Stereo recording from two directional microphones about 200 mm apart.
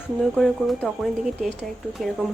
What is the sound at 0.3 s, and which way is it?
Speech, centre (ahead or behind).